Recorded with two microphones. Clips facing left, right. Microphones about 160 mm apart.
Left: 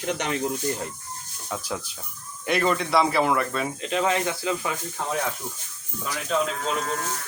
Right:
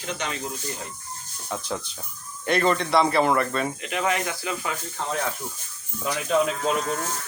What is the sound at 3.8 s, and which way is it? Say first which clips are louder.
Speech: left 2 dB; 25° left (ahead or behind).